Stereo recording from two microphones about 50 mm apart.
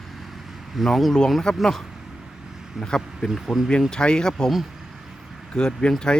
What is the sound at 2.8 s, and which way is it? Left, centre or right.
Speech, centre.